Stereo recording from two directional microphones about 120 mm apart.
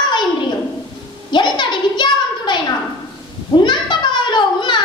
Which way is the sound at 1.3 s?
40° left (ahead or behind).